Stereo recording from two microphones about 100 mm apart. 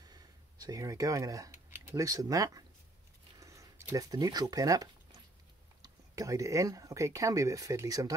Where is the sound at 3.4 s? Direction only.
30° right (ahead or behind).